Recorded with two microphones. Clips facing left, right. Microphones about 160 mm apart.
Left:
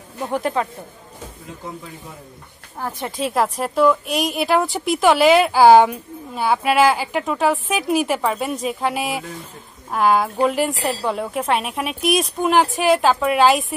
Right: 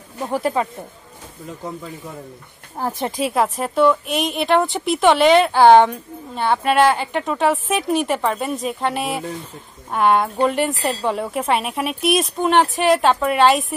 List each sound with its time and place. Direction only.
0.2 s a woman's voice: 5° right (ahead or behind)
2.8 s speech: 30° right (ahead or behind)
3.2 s a woman's voice: centre (ahead or behind)